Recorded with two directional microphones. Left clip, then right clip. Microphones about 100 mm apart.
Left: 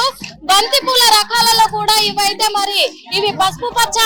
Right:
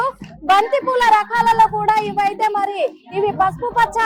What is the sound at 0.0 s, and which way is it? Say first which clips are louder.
A child's voice: left 3 dB; 10° left (ahead or behind).